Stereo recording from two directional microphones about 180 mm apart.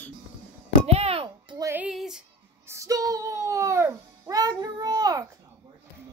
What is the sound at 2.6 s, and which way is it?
A child's voice, 15° right (ahead or behind).